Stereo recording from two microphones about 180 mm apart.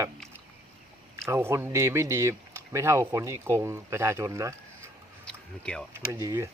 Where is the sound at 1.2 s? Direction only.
15° right (ahead or behind).